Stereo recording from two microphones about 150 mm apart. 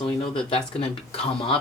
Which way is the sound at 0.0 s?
35° left (ahead or behind).